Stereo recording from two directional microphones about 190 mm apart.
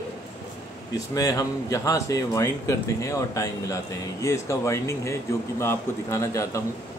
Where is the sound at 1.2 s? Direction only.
20° left (ahead or behind).